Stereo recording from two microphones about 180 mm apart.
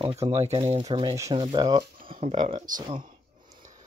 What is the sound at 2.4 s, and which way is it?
Speech, 30° right (ahead or behind).